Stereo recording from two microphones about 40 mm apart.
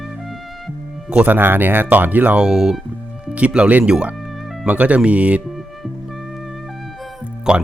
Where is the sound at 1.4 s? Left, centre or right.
Right.